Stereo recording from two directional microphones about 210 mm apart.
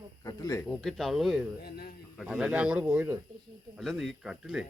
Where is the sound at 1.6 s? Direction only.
50° left (ahead or behind).